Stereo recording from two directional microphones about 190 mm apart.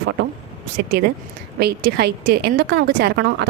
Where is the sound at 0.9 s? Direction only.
60° right (ahead or behind).